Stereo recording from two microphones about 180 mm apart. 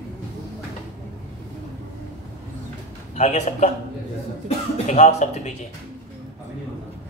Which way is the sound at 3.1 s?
40° left (ahead or behind).